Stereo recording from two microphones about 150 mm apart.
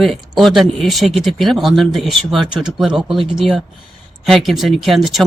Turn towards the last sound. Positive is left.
turn(degrees=0)  # may be behind; listen again after turning